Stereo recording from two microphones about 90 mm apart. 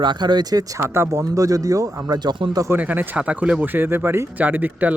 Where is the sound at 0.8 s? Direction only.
30° right (ahead or behind); by 2.6 s 55° right (ahead or behind).